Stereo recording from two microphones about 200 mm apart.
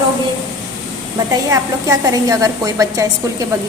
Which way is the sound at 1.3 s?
15° right (ahead or behind).